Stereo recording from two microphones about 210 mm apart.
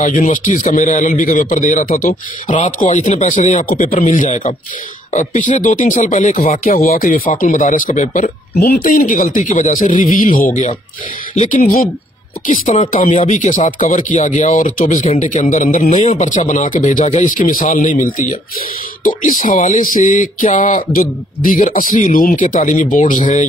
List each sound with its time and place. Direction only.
0.0 s speech: 40° left (ahead or behind)